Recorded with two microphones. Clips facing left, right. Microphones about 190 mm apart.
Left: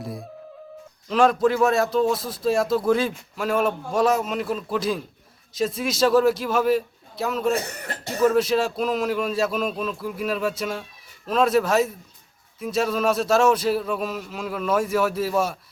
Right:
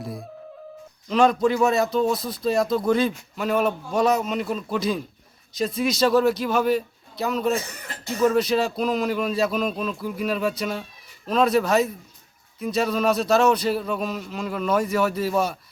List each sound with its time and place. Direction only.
0.0 s music: centre (ahead or behind)
1.0 s a man's voice: centre (ahead or behind)
7.7 s speech: 65° left (ahead or behind)
8.2 s a man's voice: centre (ahead or behind)